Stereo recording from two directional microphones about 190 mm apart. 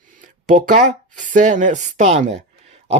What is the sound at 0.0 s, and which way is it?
Speech, 45° right (ahead or behind).